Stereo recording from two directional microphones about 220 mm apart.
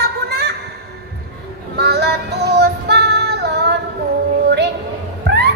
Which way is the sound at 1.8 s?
50° right (ahead or behind).